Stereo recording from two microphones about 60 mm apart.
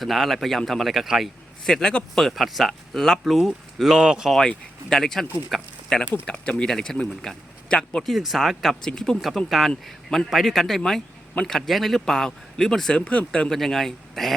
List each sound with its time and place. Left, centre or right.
0.0 s speech: centre
1.6 s speech: centre
3.9 s speech: centre
4.4 s speech: centre
6.2 s speech: centre
8.0 s speech: centre
8.8 s speech: centre
9.5 s speech: centre; by 13.5 s left
13.5 s speech: centre